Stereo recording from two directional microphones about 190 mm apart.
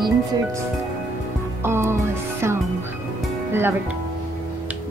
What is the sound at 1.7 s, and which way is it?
Music, 15° right (ahead or behind).